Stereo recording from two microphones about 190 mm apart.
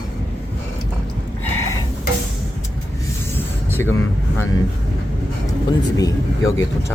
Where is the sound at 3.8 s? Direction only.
10° left (ahead or behind).